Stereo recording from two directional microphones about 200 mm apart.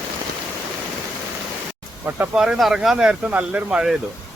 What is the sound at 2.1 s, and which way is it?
Speech, 5° right (ahead or behind).